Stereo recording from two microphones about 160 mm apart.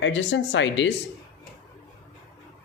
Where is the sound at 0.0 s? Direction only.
90° left.